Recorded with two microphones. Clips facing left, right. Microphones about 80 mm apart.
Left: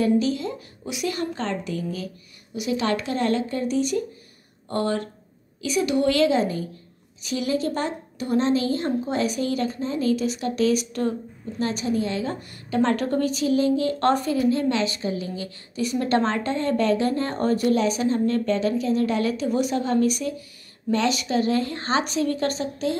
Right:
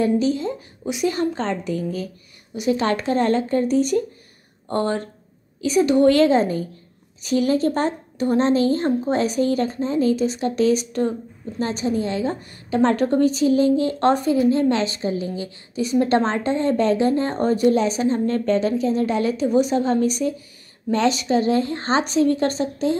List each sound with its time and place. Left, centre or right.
0.0 s a woman's voice: right